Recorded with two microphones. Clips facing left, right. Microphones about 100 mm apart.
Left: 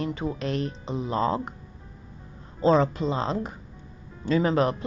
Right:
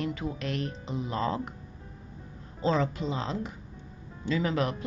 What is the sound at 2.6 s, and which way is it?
A woman's voice, 35° left (ahead or behind).